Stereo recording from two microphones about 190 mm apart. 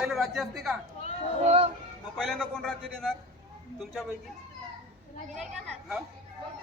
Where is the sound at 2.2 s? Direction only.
5° left (ahead or behind).